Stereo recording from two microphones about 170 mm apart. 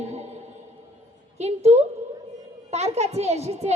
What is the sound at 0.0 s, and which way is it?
Music, 40° right (ahead or behind).